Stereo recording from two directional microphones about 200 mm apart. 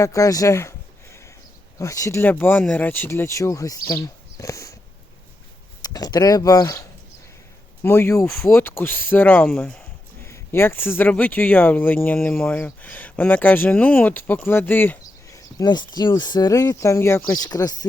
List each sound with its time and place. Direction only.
0.0 s speech: 15° left (ahead or behind)
1.8 s speech: 15° left (ahead or behind)
5.8 s speech: 20° left (ahead or behind)